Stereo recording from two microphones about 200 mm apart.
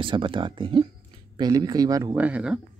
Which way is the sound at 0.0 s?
25° right (ahead or behind).